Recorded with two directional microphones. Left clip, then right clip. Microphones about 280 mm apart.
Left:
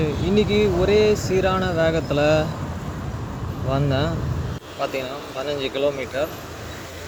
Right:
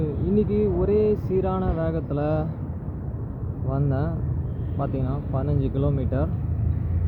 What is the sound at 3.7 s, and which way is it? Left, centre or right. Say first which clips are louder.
Speech: left 6 dB; left.